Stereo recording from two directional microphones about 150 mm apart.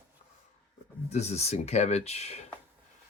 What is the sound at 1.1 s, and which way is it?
Speech, 45° left (ahead or behind).